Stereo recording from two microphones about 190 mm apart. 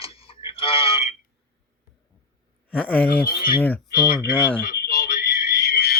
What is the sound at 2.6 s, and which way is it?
Speech, 5° left (ahead or behind).